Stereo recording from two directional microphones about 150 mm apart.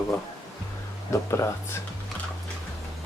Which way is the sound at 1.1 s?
20° left (ahead or behind).